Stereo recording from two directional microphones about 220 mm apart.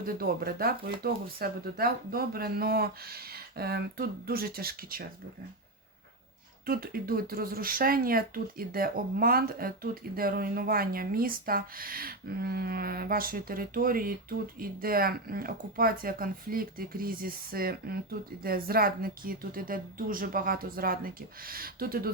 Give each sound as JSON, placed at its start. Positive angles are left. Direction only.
{"t": 0.0, "sound": "speech", "side_deg": -40}
{"t": 6.7, "sound": "speech", "side_deg": -40}